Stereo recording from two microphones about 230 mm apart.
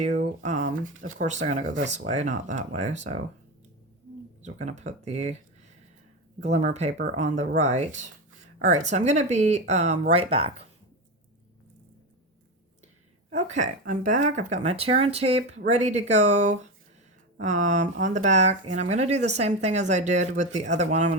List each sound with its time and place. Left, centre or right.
0.0 s speech: right
4.4 s speech: right
6.4 s speech: right
13.3 s speech: right